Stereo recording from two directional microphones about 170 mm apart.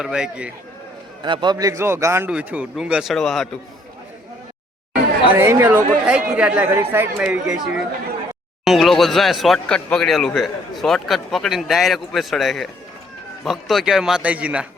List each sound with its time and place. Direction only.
0.0 s speech: 5° right (ahead or behind)
1.2 s speech: 25° right (ahead or behind); by 3.5 s centre (ahead or behind)
5.4 s speech: 15° right (ahead or behind)